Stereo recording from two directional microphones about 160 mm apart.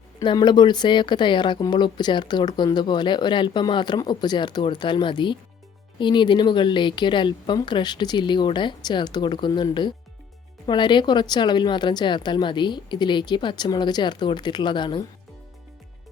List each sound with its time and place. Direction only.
0.2 s speech: 25° left (ahead or behind)